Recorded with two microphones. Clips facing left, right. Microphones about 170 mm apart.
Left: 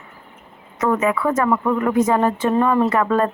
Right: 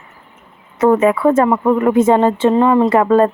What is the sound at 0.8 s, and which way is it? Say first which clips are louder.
A woman's voice: right 7 dB; 30° right (ahead or behind).